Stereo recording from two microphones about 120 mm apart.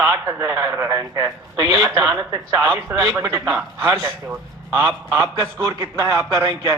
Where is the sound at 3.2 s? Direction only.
30° right (ahead or behind).